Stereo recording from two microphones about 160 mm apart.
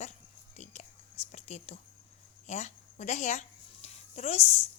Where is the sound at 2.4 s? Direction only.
45° left (ahead or behind).